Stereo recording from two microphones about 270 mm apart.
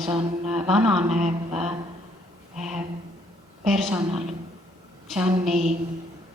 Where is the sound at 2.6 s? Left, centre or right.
Centre.